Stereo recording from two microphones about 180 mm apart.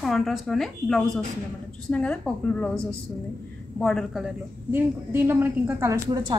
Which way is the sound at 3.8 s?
Centre (ahead or behind).